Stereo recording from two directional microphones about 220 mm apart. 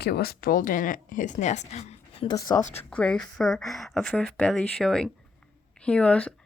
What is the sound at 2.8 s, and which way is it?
Speech, 5° left (ahead or behind).